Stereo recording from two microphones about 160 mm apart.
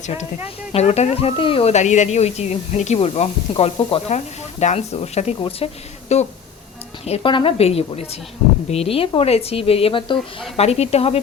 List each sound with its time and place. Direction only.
0.7 s speech: 40° left (ahead or behind)